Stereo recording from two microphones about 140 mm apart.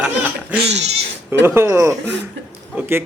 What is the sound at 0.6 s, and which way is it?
Speech, 50° right (ahead or behind).